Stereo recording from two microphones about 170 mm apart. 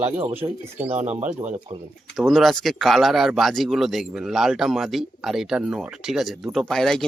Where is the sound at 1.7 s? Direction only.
45° right (ahead or behind).